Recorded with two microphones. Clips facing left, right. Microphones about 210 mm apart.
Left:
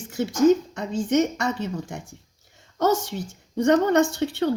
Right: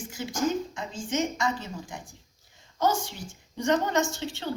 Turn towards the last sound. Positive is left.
turn(degrees=65)  # may be behind; listen again after turning